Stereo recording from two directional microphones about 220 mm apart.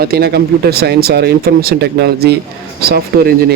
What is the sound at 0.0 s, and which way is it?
Speech, 45° right (ahead or behind).